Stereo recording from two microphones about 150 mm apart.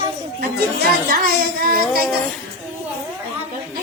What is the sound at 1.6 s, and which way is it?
Speech, 70° right (ahead or behind).